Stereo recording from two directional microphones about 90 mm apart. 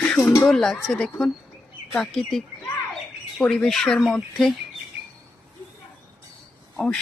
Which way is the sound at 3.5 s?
5° left (ahead or behind).